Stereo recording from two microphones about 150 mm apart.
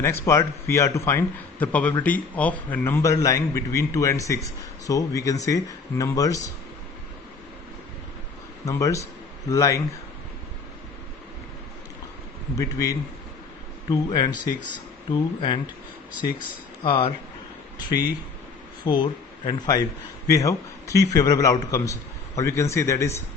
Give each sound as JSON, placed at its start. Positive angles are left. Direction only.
{"t": 0.0, "sound": "a man's voice", "side_deg": 15}
{"t": 8.6, "sound": "a man's voice", "side_deg": 20}
{"t": 12.5, "sound": "a man's voice", "side_deg": 20}
{"t": 16.8, "sound": "a man's voice", "side_deg": 35}